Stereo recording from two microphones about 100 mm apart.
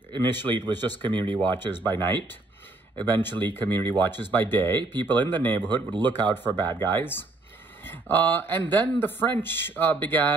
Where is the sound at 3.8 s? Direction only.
50° right (ahead or behind).